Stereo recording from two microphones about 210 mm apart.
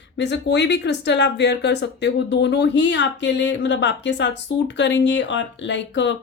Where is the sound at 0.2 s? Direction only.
55° left (ahead or behind).